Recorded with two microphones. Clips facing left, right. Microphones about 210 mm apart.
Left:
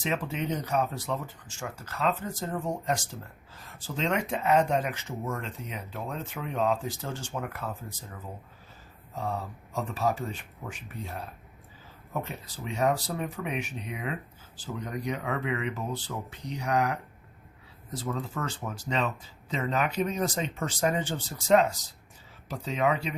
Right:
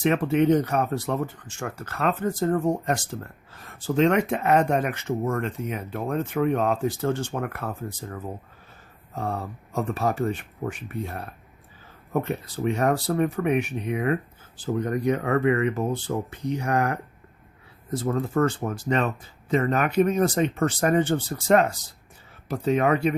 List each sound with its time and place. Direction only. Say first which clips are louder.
0.0 s speech: right 11 dB; 60° right (ahead or behind)